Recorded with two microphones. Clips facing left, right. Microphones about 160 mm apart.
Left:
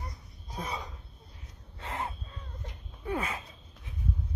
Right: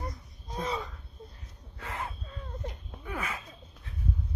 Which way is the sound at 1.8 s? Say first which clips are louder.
Left 1 dB; 25° left (ahead or behind).